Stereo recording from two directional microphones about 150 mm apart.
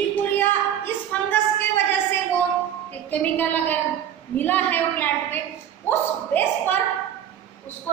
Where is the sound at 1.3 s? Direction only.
15° left (ahead or behind).